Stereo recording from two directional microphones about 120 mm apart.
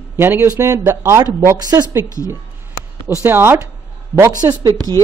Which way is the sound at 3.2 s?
20° right (ahead or behind).